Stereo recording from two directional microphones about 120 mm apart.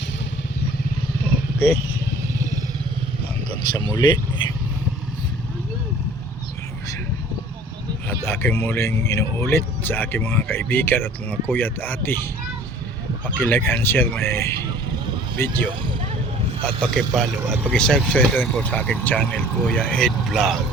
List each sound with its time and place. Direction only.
1.5 s speech: 15° left (ahead or behind)
3.9 s speech: 40° left (ahead or behind)
8.2 s speech: 20° left (ahead or behind)
13.5 s speech: 20° left (ahead or behind)
16.6 s speech: 5° left (ahead or behind)
17.5 s speech: 15° right (ahead or behind)
17.7 s speech: 5° left (ahead or behind)